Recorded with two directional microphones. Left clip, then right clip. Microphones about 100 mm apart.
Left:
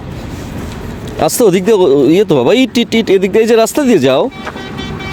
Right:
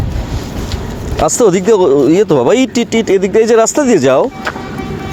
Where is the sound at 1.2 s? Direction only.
50° left (ahead or behind).